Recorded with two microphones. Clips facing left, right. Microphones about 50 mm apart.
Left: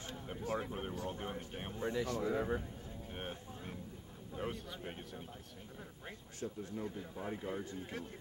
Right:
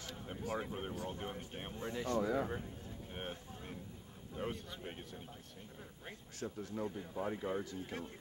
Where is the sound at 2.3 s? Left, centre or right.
Centre.